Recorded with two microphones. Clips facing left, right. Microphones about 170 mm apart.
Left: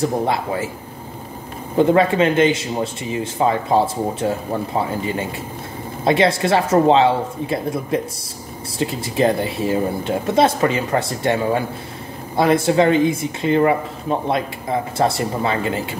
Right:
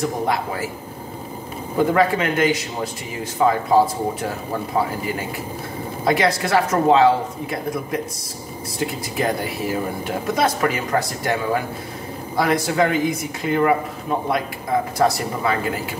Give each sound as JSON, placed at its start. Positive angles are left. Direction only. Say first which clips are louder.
{"t": 1.8, "sound": "speech", "louder": "left 3 dB", "side_deg": 25}
{"t": 15.0, "sound": "speech", "louder": "left 1 dB", "side_deg": 25}